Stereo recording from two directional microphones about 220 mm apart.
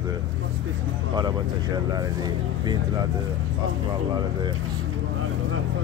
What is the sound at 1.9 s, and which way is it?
Speech, 15° right (ahead or behind).